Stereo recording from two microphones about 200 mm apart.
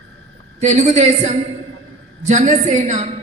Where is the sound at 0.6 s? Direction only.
35° right (ahead or behind).